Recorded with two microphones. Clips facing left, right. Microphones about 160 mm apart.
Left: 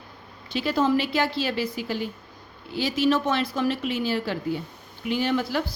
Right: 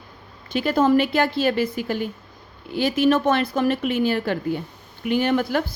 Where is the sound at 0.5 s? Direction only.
50° right (ahead or behind).